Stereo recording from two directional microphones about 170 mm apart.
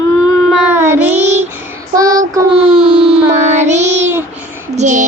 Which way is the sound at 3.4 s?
45° right (ahead or behind).